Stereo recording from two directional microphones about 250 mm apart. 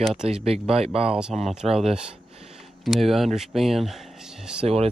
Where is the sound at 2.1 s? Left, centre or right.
Right.